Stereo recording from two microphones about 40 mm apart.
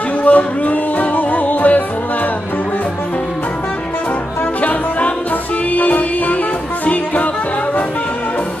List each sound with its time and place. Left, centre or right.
0.2 s music: left
4.6 s music: left